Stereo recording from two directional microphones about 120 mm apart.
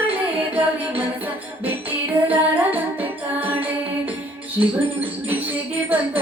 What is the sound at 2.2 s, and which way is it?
Music, 15° right (ahead or behind).